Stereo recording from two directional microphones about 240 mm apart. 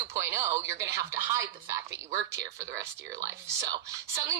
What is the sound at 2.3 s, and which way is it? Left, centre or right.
Speech, right.